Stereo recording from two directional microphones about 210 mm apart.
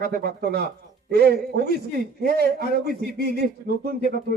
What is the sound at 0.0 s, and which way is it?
A man's voice, 50° right (ahead or behind).